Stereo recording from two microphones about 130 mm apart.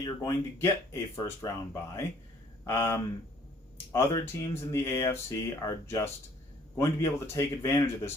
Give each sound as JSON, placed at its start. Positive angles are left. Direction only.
{"t": 0.0, "sound": "speech", "side_deg": 20}